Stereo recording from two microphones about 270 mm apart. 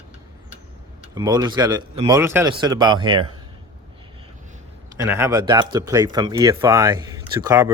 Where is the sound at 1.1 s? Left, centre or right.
Centre.